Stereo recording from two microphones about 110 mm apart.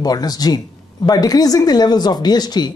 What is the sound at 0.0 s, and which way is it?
A woman's voice, 35° left (ahead or behind).